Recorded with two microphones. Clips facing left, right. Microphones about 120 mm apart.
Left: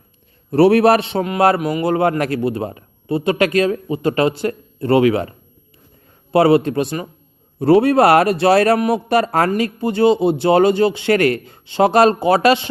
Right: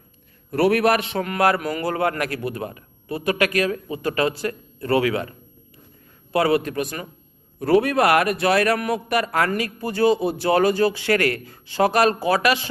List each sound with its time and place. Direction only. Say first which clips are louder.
0.5 s a man's voice: left 7 dB; 30° left (ahead or behind)
6.3 s a man's voice: left 7 dB; 30° left (ahead or behind)